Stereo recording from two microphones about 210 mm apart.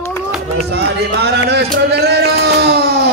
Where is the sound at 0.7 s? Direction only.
50° right (ahead or behind).